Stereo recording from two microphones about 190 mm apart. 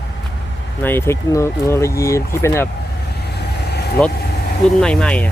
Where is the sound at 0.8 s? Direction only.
10° left (ahead or behind).